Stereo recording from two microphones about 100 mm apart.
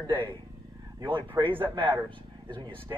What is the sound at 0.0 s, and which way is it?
Speech, 55° right (ahead or behind).